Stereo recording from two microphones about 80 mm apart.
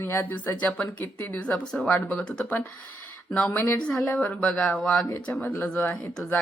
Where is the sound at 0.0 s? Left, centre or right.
Left.